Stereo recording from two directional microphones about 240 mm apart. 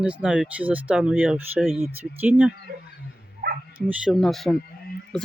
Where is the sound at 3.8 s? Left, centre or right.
Centre.